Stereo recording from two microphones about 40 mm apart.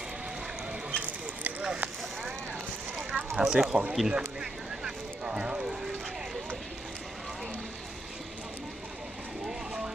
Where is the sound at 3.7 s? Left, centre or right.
Right.